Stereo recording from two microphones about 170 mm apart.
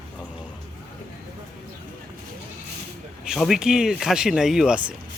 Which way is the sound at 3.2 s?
Centre (ahead or behind).